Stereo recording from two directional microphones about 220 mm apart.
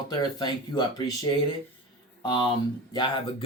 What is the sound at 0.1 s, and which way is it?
Speech, 20° left (ahead or behind).